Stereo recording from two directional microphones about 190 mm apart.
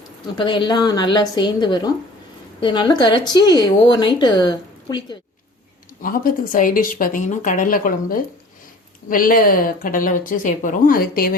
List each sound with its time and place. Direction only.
0.3 s speech: 25° left (ahead or behind)
6.0 s a woman's voice: 50° left (ahead or behind)